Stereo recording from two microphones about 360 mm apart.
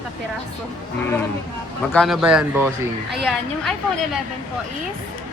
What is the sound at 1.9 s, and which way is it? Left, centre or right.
A woman's voice, centre.